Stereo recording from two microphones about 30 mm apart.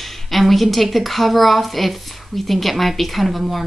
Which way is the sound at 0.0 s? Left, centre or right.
Centre.